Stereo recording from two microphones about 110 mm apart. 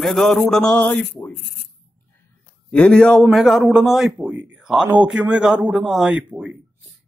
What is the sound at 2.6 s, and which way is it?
A man's voice, 10° left (ahead or behind).